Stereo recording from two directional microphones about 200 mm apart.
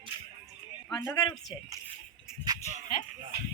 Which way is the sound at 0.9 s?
20° left (ahead or behind).